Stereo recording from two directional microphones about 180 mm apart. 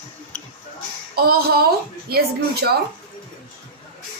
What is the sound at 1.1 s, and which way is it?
Speech, 55° right (ahead or behind).